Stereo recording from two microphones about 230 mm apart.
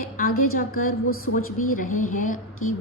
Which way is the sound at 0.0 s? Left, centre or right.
Left.